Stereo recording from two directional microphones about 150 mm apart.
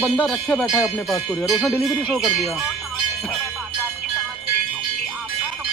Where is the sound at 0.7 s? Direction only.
20° left (ahead or behind).